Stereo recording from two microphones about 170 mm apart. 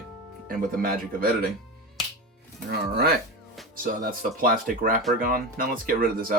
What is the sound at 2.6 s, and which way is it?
Speech, 70° right (ahead or behind).